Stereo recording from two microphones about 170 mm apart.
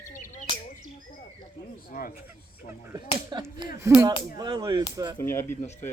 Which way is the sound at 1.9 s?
55° left (ahead or behind).